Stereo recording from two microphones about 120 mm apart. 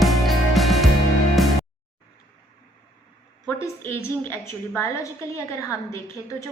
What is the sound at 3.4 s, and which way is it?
A woman's voice, 20° left (ahead or behind).